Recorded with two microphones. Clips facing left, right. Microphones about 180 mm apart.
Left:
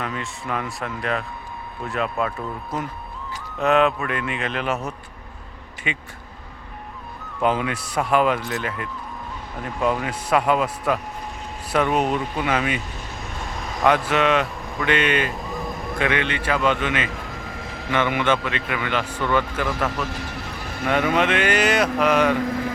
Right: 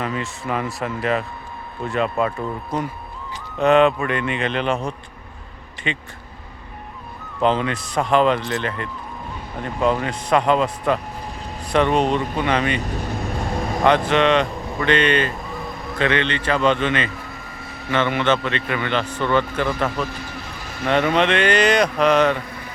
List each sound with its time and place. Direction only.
0.0 s speech: centre (ahead or behind)
7.4 s speech: 10° left (ahead or behind)
14.1 s speech: 5° left (ahead or behind)
22.4 s vehicle: 90° left